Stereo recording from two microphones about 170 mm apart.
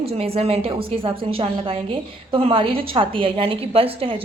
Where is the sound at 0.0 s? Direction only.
35° right (ahead or behind).